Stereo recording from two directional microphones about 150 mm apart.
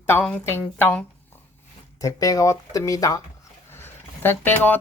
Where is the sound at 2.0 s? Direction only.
20° left (ahead or behind).